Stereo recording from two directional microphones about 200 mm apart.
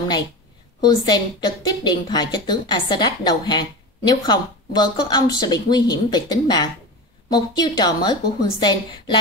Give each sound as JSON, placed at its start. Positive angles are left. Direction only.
{"t": 0.7, "sound": "a woman's voice", "side_deg": 20}